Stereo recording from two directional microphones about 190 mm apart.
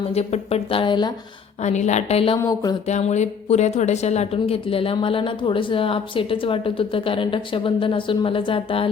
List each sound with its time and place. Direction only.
0.1 s a woman's voice: 35° left (ahead or behind)
1.6 s a woman's voice: 35° left (ahead or behind)
2.4 s a woman's voice: 20° left (ahead or behind)
2.8 s a woman's voice: 35° left (ahead or behind)